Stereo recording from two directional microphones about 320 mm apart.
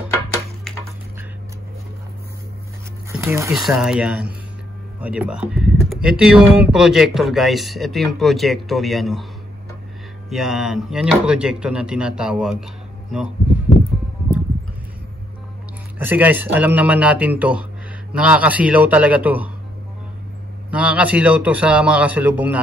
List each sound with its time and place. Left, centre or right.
3.1 s speech: centre
10.3 s speech: centre
16.0 s speech: centre
20.7 s speech: centre